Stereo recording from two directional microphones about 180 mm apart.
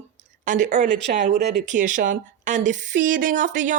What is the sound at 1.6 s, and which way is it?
Speech, 45° right (ahead or behind).